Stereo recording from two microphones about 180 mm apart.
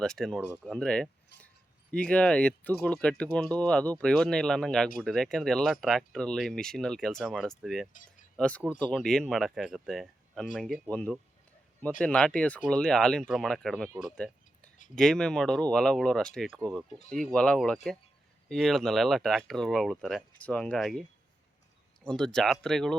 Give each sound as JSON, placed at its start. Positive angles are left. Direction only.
{"t": 0.0, "sound": "speech", "side_deg": 5}
{"t": 7.9, "sound": "a sound", "side_deg": 45}
{"t": 8.4, "sound": "speech", "side_deg": 5}
{"t": 14.2, "sound": "a sound", "side_deg": 5}
{"t": 14.9, "sound": "speech", "side_deg": 5}
{"t": 22.0, "sound": "speech", "side_deg": 5}